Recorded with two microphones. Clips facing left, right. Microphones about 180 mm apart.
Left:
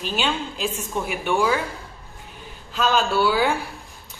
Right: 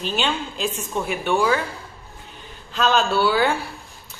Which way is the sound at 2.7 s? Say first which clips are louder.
Right 1 dB; 10° left (ahead or behind).